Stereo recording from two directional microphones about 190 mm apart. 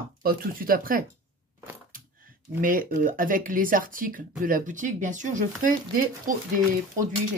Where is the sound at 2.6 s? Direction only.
45° right (ahead or behind).